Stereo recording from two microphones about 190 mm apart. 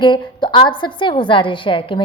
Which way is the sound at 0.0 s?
25° left (ahead or behind).